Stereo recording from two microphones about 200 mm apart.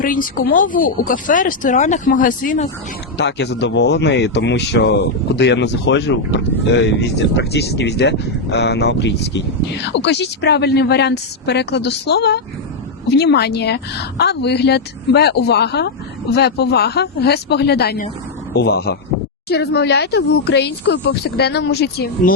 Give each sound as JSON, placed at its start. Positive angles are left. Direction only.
{"t": 0.0, "sound": "speech", "side_deg": 45}
{"t": 3.2, "sound": "speech", "side_deg": 60}